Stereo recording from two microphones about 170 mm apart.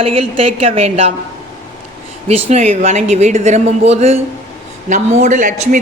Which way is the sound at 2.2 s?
40° right (ahead or behind).